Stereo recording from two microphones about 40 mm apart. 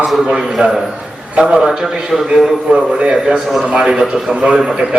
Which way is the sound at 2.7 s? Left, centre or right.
Right.